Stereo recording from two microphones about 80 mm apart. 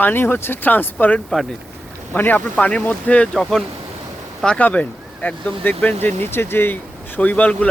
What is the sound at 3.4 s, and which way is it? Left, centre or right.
Speech, centre.